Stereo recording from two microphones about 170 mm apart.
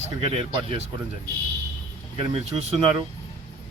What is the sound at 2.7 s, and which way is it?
Speech, 35° right (ahead or behind).